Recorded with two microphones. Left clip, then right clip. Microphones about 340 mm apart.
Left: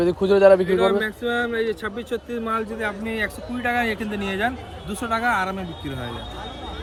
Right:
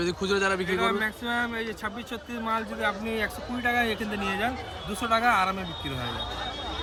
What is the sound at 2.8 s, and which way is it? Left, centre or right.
A man's voice, centre.